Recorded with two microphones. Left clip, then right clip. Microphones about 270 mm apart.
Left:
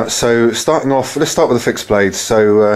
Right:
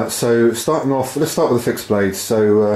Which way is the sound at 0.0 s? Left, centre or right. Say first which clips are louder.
Left 3 dB; centre.